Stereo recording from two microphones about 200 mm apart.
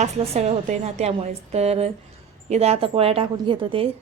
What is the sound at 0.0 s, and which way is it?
A woman's voice, 35° right (ahead or behind).